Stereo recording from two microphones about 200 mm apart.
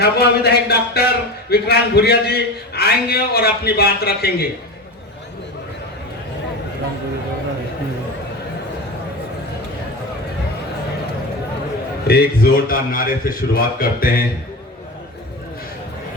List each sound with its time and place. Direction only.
0.0 s a man's voice: 55° left (ahead or behind)
12.0 s a man's voice: 50° left (ahead or behind)